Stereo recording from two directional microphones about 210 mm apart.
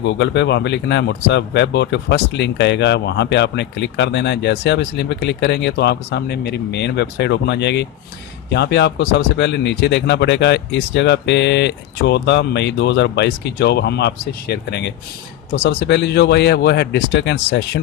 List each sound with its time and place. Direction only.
0.0 s speech: 55° left (ahead or behind)